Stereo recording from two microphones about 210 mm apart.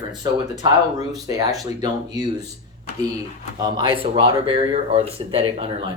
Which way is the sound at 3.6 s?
20° right (ahead or behind).